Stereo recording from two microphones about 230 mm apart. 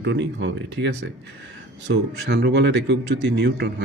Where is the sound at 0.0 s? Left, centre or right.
Right.